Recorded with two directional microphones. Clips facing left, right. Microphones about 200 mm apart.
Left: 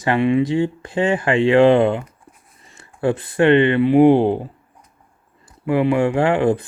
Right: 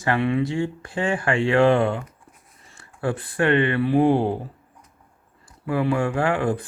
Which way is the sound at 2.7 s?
20° left (ahead or behind).